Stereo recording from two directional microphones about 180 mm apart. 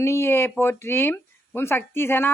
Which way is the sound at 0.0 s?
15° left (ahead or behind).